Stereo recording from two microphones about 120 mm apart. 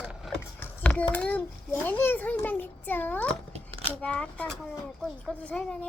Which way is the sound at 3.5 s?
55° right (ahead or behind).